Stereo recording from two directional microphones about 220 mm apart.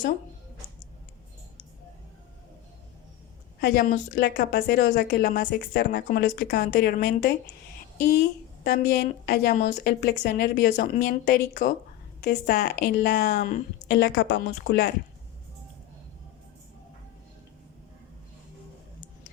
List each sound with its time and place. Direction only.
3.6 s speech: 45° left (ahead or behind)
8.6 s speech: 45° left (ahead or behind)